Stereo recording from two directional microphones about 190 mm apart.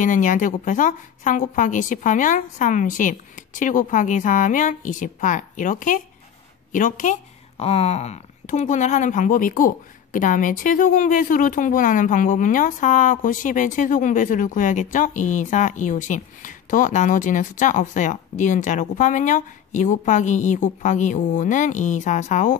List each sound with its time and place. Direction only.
0.0 s a woman's voice: 40° left (ahead or behind)